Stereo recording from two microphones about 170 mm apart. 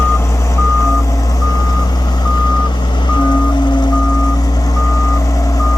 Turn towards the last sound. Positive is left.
turn(degrees=20)  # may be behind; listen again after turning